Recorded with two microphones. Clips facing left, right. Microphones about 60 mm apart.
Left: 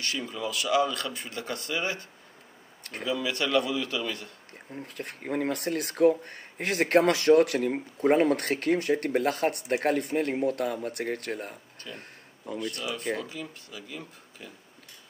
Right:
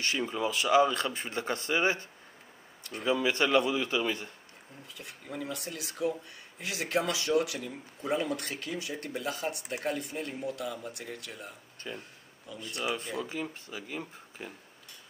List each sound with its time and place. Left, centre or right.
0.0 s speech: right
4.7 s speech: left
12.0 s a sound: left
13.2 s speech: right